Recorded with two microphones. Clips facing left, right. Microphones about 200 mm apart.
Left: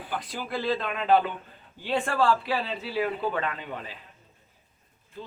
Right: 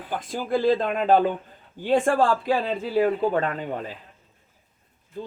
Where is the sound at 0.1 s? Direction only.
45° right (ahead or behind).